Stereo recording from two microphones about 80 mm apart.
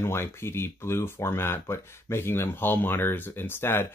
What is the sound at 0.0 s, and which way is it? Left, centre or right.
Speech, left.